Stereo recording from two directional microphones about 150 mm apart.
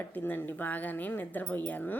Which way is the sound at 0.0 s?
10° left (ahead or behind).